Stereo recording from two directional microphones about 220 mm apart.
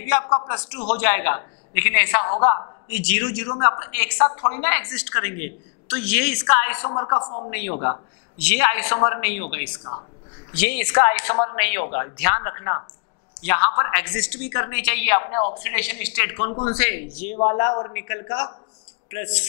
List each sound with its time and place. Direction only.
0.2 s a man's voice: 25° left (ahead or behind)
0.9 s a woman's voice: 15° left (ahead or behind)
2.9 s a woman's voice: 10° left (ahead or behind)
6.9 s a man's voice: 25° left (ahead or behind)
7.5 s a woman's voice: 15° left (ahead or behind)